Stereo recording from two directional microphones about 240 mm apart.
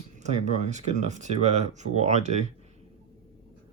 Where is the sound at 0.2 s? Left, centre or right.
Right.